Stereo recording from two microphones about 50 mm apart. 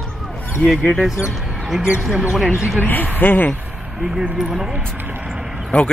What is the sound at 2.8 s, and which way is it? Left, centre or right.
Speech, left.